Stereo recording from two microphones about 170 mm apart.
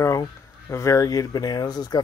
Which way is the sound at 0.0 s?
15° left (ahead or behind).